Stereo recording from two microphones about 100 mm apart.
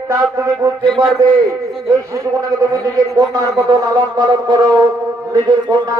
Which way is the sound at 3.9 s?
45° right (ahead or behind).